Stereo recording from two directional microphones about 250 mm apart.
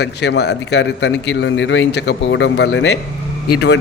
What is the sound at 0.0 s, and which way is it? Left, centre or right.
A man's voice, left.